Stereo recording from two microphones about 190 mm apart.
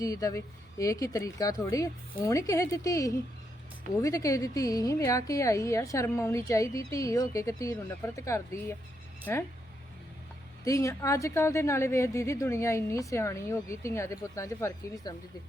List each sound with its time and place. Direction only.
0.0 s speech: 20° left (ahead or behind)
10.6 s speech: 15° left (ahead or behind)